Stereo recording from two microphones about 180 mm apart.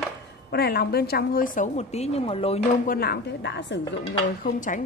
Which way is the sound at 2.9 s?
60° left (ahead or behind).